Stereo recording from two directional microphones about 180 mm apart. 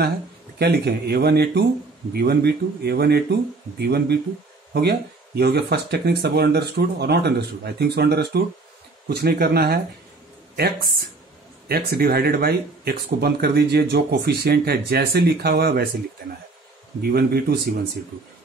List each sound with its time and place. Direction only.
0.6 s speech: 65° right (ahead or behind)